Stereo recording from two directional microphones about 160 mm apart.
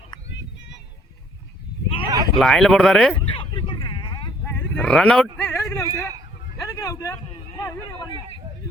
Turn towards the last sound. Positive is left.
turn(degrees=20)  # may be behind; listen again after turning